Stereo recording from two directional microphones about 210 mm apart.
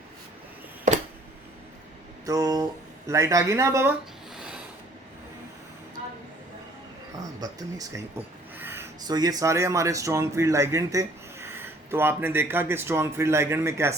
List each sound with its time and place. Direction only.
2.2 s speech: 15° right (ahead or behind)
7.2 s speech: 15° right (ahead or behind)